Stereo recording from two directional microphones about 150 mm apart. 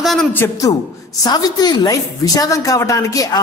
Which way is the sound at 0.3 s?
20° left (ahead or behind).